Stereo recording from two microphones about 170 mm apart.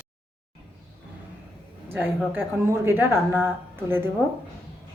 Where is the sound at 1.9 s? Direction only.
10° right (ahead or behind).